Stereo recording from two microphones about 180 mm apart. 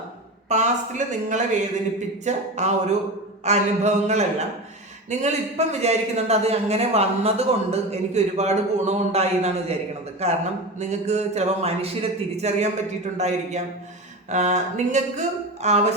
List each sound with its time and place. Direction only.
0.4 s a man's voice: 40° right (ahead or behind)